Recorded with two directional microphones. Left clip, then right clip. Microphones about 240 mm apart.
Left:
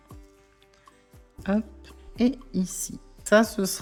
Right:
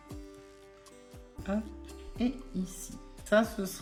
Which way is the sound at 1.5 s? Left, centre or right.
Left.